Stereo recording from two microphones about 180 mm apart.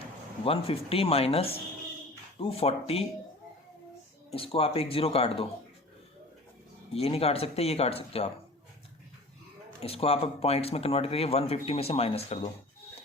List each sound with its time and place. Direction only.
0.4 s speech: 30° left (ahead or behind)
4.3 s speech: 35° left (ahead or behind)
6.9 s speech: 35° left (ahead or behind)
9.8 s speech: 35° left (ahead or behind)